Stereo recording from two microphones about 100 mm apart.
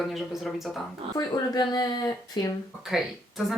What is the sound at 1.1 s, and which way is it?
Speech, 45° left (ahead or behind).